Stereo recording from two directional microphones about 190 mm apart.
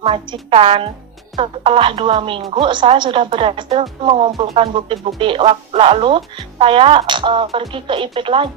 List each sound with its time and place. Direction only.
0.0 s speech: 30° right (ahead or behind)